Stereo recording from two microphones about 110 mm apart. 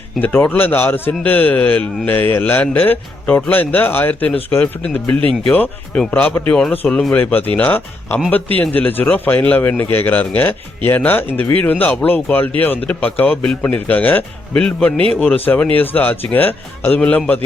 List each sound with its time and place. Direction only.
0.2 s a man's voice: 20° left (ahead or behind)